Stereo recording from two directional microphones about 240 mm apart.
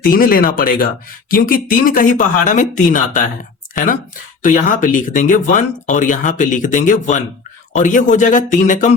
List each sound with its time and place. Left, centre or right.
0.0 s speech: left
4.4 s speech: left